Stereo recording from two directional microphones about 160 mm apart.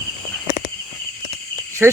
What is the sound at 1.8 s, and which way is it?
Speech, 10° right (ahead or behind).